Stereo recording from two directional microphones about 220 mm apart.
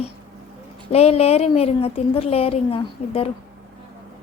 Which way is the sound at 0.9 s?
25° left (ahead or behind).